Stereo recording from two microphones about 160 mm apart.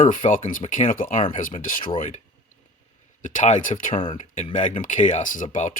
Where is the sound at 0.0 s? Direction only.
50° left (ahead or behind).